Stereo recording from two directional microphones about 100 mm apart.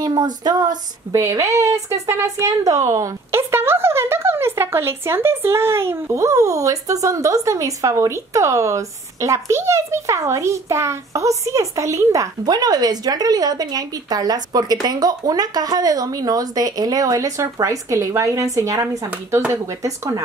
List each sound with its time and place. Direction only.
0.0 s speech: 45° right (ahead or behind)
1.1 s speech: 30° right (ahead or behind)